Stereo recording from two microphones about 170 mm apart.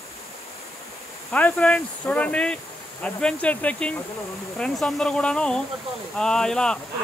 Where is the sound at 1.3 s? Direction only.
5° left (ahead or behind).